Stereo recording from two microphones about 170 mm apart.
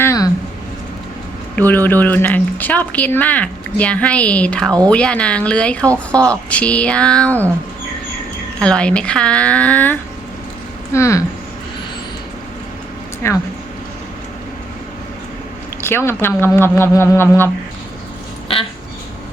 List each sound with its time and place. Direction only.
0.0 s a sound: 15° left (ahead or behind)
1.5 s speech: 10° left (ahead or behind)
8.5 s speech: 5° left (ahead or behind)
13.2 s speech: 15° left (ahead or behind)
15.8 s speech: 15° left (ahead or behind)